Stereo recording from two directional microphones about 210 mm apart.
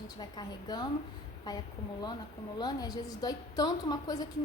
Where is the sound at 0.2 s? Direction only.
20° left (ahead or behind).